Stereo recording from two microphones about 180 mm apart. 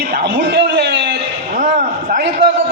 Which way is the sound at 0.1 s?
60° right (ahead or behind).